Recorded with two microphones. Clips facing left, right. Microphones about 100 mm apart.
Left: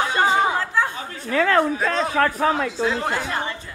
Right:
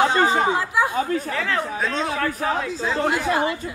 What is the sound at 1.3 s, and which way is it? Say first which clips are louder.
A man's voice: left 6 dB; 50° left (ahead or behind).